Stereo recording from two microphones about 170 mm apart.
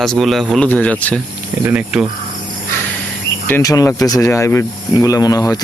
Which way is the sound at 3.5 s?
20° left (ahead or behind).